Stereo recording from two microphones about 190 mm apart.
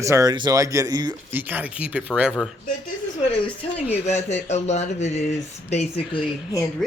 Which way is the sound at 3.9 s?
35° left (ahead or behind).